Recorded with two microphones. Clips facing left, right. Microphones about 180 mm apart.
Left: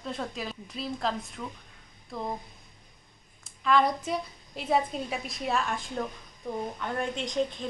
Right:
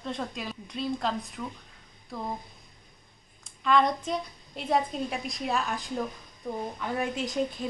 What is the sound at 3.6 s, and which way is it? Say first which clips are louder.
A woman's voice: even; 5° left (ahead or behind).